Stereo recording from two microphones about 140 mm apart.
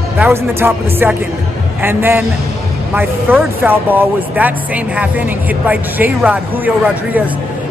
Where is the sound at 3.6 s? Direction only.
15° right (ahead or behind).